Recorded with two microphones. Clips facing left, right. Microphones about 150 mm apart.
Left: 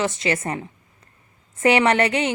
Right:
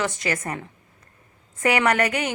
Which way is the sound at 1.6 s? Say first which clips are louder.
Left 3 dB; 25° left (ahead or behind).